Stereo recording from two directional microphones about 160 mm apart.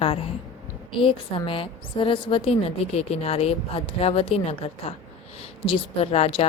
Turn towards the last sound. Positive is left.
turn(degrees=35)  # may be behind; listen again after turning